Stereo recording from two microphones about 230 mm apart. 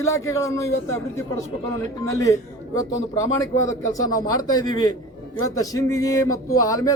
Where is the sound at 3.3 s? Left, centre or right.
Centre.